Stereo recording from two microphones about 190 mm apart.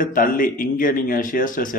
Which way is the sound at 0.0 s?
45° left (ahead or behind).